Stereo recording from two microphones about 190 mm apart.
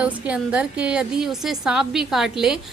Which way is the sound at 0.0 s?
5° right (ahead or behind).